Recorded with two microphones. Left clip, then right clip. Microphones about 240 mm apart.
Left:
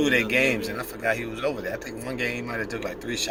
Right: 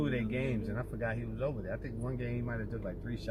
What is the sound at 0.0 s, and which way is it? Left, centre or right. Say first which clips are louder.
Speech: left 14 dB; left.